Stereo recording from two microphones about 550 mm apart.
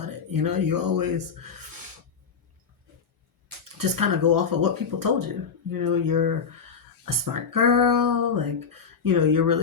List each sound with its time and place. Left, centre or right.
0.0 s speech: right
3.8 s speech: right